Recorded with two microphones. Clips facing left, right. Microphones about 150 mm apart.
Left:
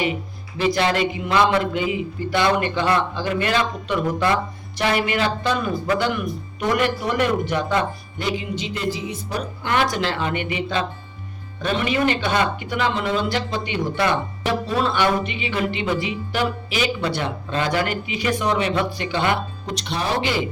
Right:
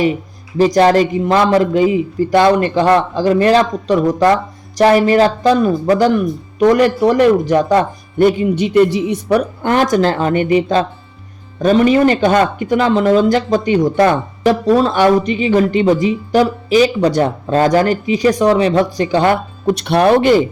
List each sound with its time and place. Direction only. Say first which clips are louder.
0.5 s speech: right 10 dB; 40° right (ahead or behind); by 9.5 s 65° right (ahead or behind)
9.6 s speech: right 7 dB; 45° right (ahead or behind)
19.7 s speech: right 13 dB; 60° right (ahead or behind)